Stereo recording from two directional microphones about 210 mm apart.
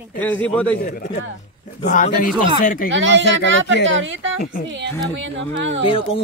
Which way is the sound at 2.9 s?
60° right (ahead or behind).